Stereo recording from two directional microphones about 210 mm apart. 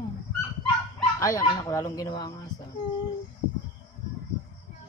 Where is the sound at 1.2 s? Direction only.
15° left (ahead or behind).